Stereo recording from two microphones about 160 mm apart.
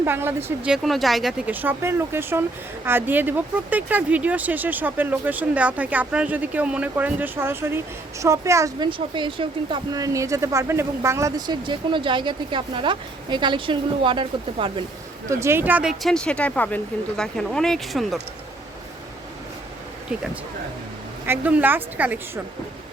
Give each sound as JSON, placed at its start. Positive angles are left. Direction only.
{"t": 0.0, "sound": "speech", "side_deg": -15}
{"t": 0.7, "sound": "speech", "side_deg": 0}
{"t": 8.9, "sound": "speech", "side_deg": -30}
{"t": 15.3, "sound": "speech", "side_deg": -15}
{"t": 21.2, "sound": "speech", "side_deg": -10}